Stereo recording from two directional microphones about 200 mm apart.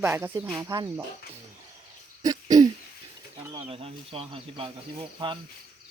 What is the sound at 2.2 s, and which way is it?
Throat clearing, 15° right (ahead or behind).